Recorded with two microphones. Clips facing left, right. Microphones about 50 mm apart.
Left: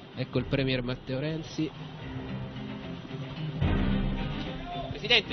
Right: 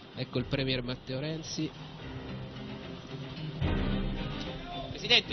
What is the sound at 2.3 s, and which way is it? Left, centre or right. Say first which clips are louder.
Music: left 3 dB; centre.